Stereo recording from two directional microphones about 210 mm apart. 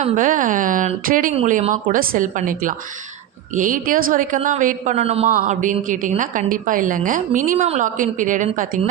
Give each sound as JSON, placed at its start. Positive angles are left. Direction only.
{"t": 0.0, "sound": "a woman's voice", "side_deg": -40}